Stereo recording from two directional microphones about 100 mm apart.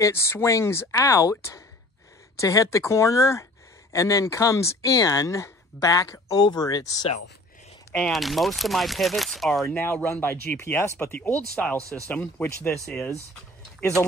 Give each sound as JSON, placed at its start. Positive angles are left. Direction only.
{"t": 0.0, "sound": "speech", "side_deg": 25}
{"t": 8.0, "sound": "speech", "side_deg": 0}
{"t": 9.7, "sound": "speech", "side_deg": 15}
{"t": 12.8, "sound": "speech", "side_deg": 5}